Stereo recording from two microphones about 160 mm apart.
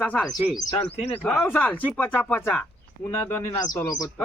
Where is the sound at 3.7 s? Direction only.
20° left (ahead or behind).